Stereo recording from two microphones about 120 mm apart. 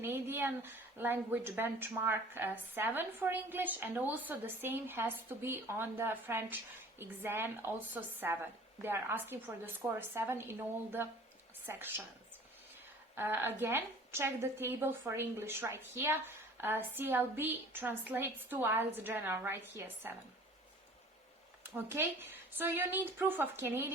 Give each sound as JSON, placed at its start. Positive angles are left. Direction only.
{"t": 0.0, "sound": "a woman's voice", "side_deg": -20}
{"t": 13.1, "sound": "a woman's voice", "side_deg": -20}
{"t": 21.6, "sound": "a woman's voice", "side_deg": -20}